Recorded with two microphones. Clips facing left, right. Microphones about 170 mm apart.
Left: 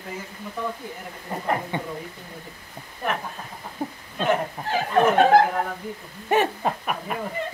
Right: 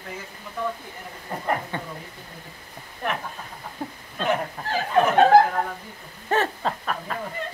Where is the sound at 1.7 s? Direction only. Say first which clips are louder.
Left 3 dB; 15° left (ahead or behind).